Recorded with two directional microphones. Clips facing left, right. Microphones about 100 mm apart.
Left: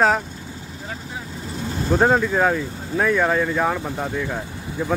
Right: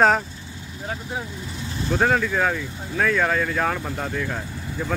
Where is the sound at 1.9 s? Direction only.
20° left (ahead or behind).